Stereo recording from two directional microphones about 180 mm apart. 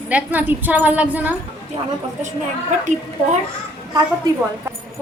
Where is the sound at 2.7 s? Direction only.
45° right (ahead or behind).